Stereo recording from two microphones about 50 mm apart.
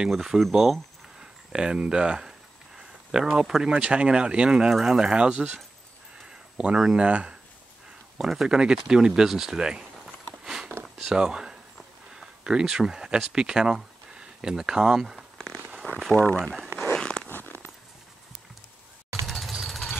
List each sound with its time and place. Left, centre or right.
0.1 s speech: centre
1.2 s speech: centre
4.6 s speech: centre
5.0 s speech: centre
8.2 s speech: centre
8.8 s a sound: centre
11.0 s speech: centre
15.3 s a sound: centre
16.9 s zipper: centre
17.3 s zipper: left
19.2 s jackhammer: centre